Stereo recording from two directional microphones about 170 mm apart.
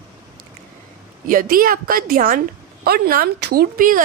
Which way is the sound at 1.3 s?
55° right (ahead or behind).